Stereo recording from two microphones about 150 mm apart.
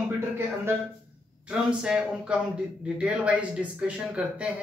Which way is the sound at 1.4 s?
5° right (ahead or behind).